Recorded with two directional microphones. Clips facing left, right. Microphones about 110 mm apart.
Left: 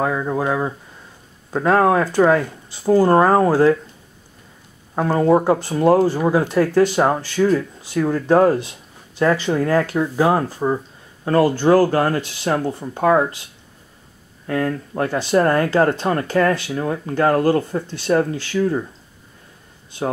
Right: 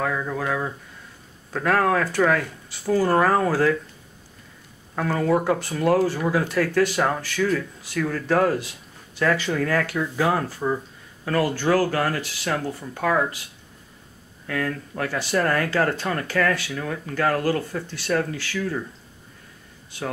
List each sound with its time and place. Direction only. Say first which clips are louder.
0.0 s speech: left 5 dB; 25° left (ahead or behind)
4.9 s speech: left 6 dB; 25° left (ahead or behind)
14.4 s speech: left 6 dB; 30° left (ahead or behind)